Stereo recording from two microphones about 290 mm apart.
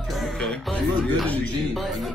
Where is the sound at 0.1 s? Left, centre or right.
Centre.